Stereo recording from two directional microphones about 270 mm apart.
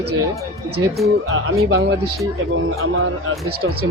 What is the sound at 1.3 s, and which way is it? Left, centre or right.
Speech, right.